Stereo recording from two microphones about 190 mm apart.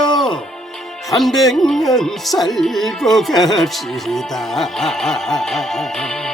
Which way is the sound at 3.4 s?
Centre (ahead or behind).